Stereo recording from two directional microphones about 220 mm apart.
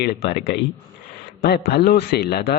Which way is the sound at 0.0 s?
45° left (ahead or behind).